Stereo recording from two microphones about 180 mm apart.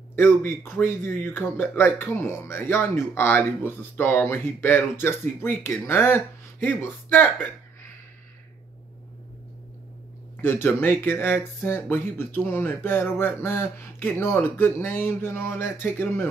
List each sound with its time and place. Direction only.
0.1 s a man's voice: 10° left (ahead or behind)
10.4 s a man's voice: 10° left (ahead or behind)